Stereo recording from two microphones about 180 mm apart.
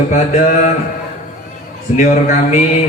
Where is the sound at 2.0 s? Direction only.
40° left (ahead or behind).